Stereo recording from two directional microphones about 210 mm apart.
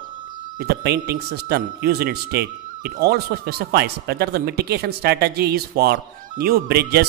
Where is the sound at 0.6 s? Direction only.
50° right (ahead or behind).